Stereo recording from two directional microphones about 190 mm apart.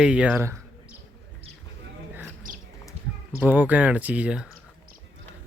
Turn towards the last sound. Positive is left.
turn(degrees=-5)  # may be behind; listen again after turning